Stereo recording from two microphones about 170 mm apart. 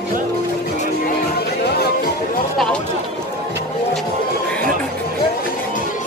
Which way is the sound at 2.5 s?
5° left (ahead or behind).